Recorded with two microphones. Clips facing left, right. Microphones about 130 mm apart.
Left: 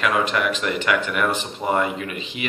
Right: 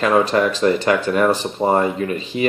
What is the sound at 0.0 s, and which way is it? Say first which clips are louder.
Speech: right 6 dB; 35° right (ahead or behind).